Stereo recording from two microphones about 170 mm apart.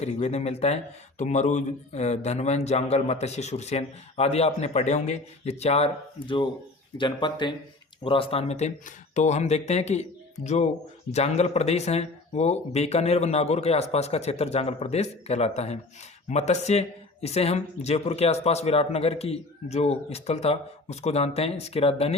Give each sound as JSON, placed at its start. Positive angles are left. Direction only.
{"t": 0.0, "sound": "speech", "side_deg": 40}